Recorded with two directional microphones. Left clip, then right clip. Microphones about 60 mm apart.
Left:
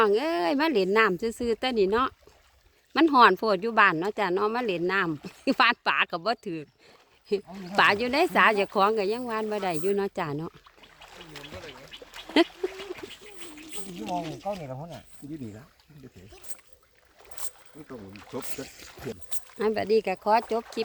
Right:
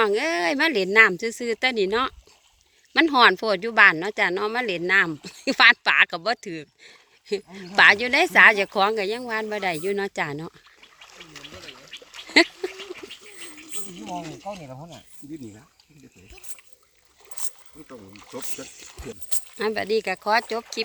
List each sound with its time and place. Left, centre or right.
0.0 s speech: centre
9.8 s speech: centre
11.0 s rowboat: right
12.5 s a sound: centre
13.8 s speech: centre
14.6 s speech: right
17.8 s speech: centre